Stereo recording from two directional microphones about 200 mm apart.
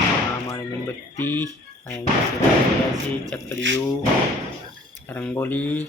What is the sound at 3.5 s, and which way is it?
Speech, 65° right (ahead or behind).